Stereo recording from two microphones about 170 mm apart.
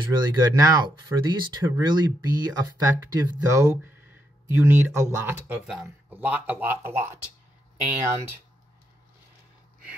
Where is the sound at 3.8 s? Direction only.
10° right (ahead or behind).